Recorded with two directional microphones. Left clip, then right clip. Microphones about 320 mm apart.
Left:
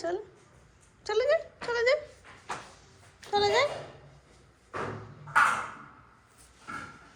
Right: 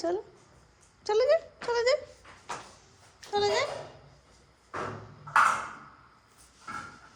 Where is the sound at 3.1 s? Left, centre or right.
Centre.